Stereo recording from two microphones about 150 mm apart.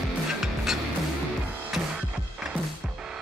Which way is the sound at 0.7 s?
Centre (ahead or behind).